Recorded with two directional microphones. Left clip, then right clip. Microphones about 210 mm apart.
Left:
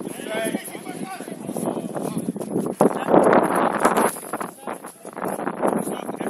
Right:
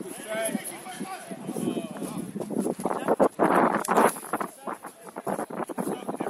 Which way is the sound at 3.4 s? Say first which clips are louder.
Left 1 dB; centre (ahead or behind).